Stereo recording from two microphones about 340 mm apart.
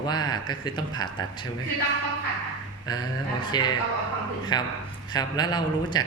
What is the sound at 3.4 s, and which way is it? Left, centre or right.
A man's voice, centre.